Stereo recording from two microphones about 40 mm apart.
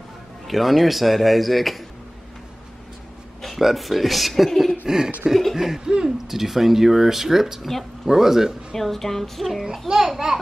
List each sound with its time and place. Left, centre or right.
0.5 s a man's voice: centre
3.4 s a man's voice: centre
4.8 s speech: centre
7.6 s speech: centre
8.1 s speech: centre
8.7 s a man's voice: centre
9.7 s speech: centre